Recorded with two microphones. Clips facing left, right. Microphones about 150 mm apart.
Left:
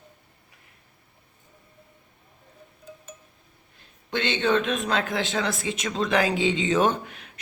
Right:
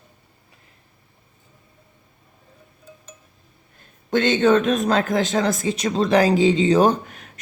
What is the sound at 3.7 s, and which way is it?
A man's voice, 45° right (ahead or behind).